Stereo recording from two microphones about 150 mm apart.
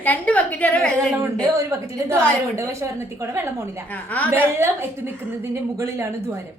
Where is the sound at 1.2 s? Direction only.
20° right (ahead or behind).